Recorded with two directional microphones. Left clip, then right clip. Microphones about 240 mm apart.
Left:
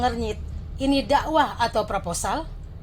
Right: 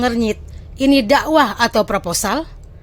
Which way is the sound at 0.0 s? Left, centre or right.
Right.